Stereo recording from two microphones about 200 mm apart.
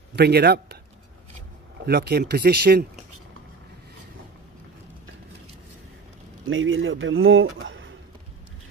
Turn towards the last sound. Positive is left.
turn(degrees=-70)  # may be behind; listen again after turning